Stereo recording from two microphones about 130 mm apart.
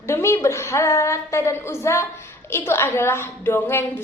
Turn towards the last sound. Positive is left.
turn(degrees=15)  # may be behind; listen again after turning